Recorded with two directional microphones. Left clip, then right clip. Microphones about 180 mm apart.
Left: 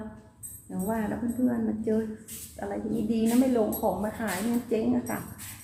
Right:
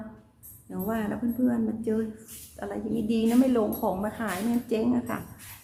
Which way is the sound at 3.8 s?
25° right (ahead or behind).